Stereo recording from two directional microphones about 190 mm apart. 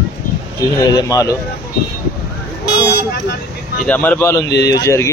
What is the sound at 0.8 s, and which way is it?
Speech, 20° left (ahead or behind).